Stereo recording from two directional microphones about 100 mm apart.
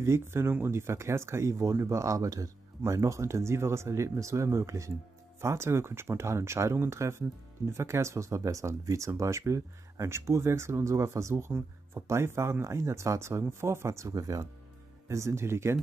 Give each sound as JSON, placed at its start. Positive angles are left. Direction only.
{"t": 0.0, "sound": "speech", "side_deg": -25}